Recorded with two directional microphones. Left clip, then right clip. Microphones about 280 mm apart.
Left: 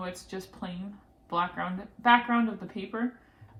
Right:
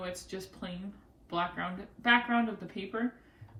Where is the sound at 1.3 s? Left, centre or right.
Centre.